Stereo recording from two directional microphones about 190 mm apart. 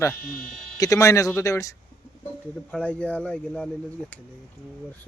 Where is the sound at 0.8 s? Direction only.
15° left (ahead or behind).